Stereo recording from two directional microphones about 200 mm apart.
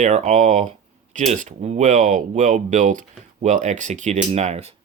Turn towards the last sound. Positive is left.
turn(degrees=-35)  # may be behind; listen again after turning